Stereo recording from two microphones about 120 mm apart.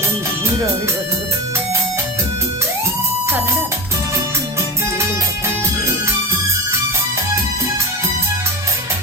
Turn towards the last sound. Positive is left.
turn(degrees=-25)  # may be behind; listen again after turning